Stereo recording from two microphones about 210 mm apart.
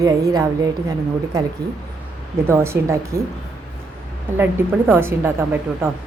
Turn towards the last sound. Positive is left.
turn(degrees=-10)  # may be behind; listen again after turning